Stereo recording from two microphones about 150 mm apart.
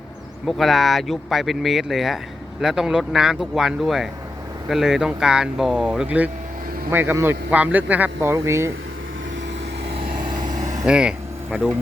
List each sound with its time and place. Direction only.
0.4 s a man's voice: centre (ahead or behind); by 8.7 s 20° right (ahead or behind)
10.5 s vehicle: 55° right (ahead or behind)
10.8 s a man's voice: 5° right (ahead or behind)